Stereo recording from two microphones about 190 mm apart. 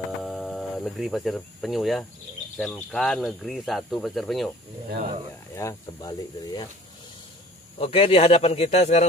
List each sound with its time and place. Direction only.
0.2 s cricket: centre (ahead or behind)
2.5 s speech: centre (ahead or behind)
4.8 s speech: 55° right (ahead or behind)
5.5 s speech: 15° left (ahead or behind)
7.8 s speech: 30° left (ahead or behind)